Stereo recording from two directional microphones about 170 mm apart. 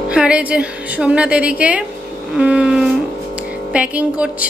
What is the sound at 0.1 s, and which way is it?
A woman's voice, 5° right (ahead or behind).